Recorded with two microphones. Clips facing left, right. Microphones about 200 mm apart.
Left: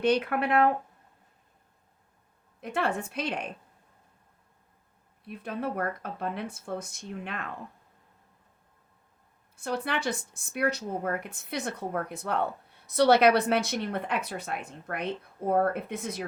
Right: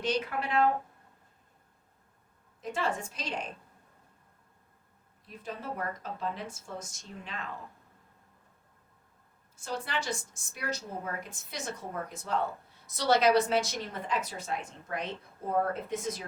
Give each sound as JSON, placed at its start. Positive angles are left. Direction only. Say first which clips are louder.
{"t": 0.0, "sound": "a woman's voice", "louder": "left 6 dB", "side_deg": 60}
{"t": 2.6, "sound": "a woman's voice", "louder": "left 3 dB", "side_deg": 60}
{"t": 5.2, "sound": "a woman's voice", "louder": "left 7 dB", "side_deg": 60}
{"t": 9.6, "sound": "a woman's voice", "louder": "left 4 dB", "side_deg": 60}